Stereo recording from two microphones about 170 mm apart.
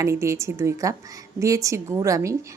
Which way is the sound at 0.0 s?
15° right (ahead or behind).